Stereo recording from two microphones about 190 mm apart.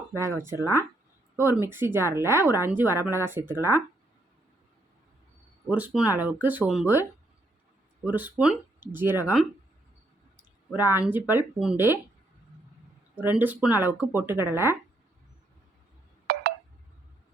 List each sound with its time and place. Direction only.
0.6 s speech: 15° left (ahead or behind)
1.4 s speech: 10° right (ahead or behind)
5.6 s speech: 10° right (ahead or behind)
10.8 s speech: 10° right (ahead or behind)
13.1 s speech: 10° right (ahead or behind)
16.3 s telephone dialing: 55° right (ahead or behind)